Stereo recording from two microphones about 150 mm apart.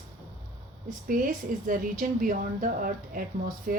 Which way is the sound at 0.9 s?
65° right (ahead or behind).